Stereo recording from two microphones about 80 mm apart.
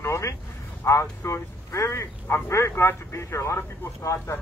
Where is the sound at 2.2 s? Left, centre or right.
Left.